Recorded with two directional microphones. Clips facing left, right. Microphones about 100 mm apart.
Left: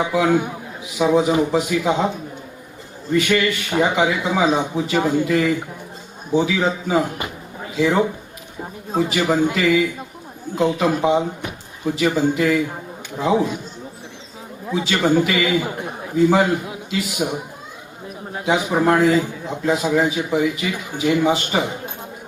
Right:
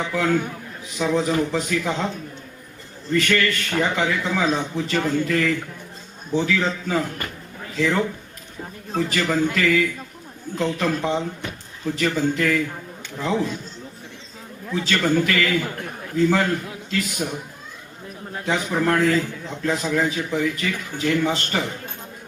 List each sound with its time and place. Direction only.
0.0 s a man's voice: 15° left (ahead or behind)
14.7 s a man's voice: 15° left (ahead or behind)